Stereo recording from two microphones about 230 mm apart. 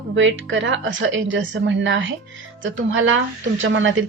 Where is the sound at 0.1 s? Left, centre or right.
Right.